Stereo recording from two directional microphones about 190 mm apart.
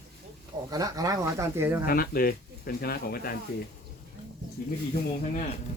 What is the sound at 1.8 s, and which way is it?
Speech, 50° left (ahead or behind).